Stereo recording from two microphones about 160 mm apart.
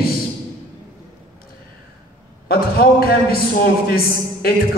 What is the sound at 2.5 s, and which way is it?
Speech, 70° left (ahead or behind).